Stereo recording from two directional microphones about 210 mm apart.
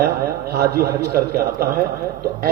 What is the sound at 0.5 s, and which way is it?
A man's voice, 50° right (ahead or behind).